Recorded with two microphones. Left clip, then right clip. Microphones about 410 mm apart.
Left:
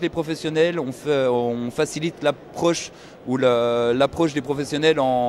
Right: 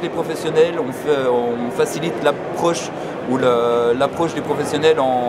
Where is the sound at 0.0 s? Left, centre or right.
Left.